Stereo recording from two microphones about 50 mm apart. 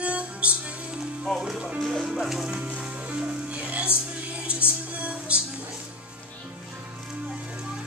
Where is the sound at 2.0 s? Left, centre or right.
Centre.